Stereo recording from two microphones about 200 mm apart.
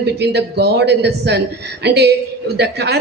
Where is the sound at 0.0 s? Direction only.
55° right (ahead or behind).